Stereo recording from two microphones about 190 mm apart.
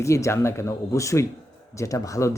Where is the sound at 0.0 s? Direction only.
15° left (ahead or behind).